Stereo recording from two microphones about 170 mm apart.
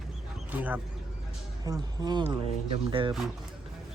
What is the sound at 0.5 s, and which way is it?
Speech, 10° right (ahead or behind).